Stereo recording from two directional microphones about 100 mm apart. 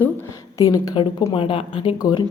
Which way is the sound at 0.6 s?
35° left (ahead or behind).